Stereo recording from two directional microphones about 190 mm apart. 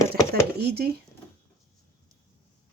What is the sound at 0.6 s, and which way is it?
Speech, 55° right (ahead or behind).